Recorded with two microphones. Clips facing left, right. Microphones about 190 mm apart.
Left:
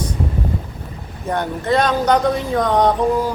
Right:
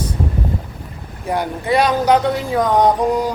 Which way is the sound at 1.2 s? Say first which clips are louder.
Even; 10° right (ahead or behind).